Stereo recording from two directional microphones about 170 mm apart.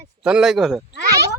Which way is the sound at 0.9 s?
65° right (ahead or behind).